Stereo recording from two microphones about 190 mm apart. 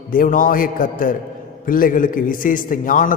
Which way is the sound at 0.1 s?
45° left (ahead or behind).